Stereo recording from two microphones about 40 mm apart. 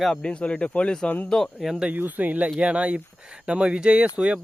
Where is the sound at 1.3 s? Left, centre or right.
Centre.